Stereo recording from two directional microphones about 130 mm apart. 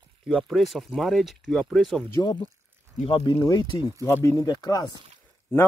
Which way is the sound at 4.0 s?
25° left (ahead or behind).